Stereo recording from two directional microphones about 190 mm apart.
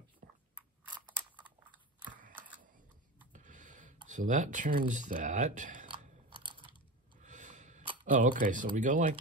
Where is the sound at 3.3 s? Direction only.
40° right (ahead or behind).